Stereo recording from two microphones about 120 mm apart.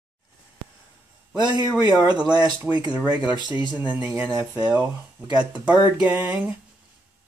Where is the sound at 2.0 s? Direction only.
10° right (ahead or behind).